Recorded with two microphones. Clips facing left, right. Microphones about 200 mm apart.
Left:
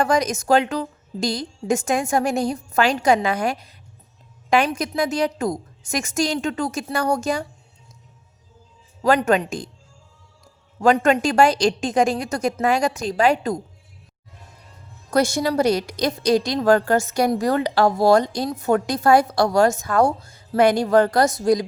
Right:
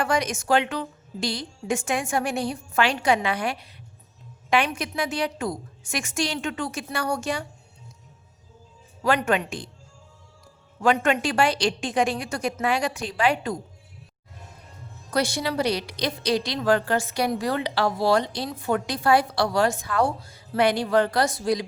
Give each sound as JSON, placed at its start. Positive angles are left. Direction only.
{"t": 0.0, "sound": "a woman's voice", "side_deg": 40}
{"t": 9.0, "sound": "a woman's voice", "side_deg": 40}
{"t": 10.8, "sound": "a woman's voice", "side_deg": 40}
{"t": 15.1, "sound": "a woman's voice", "side_deg": 45}